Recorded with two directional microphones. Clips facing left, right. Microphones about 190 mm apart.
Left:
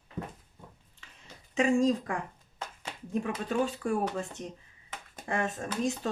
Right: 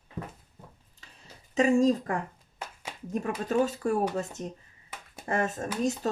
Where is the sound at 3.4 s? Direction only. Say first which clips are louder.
Right 6 dB; 40° right (ahead or behind).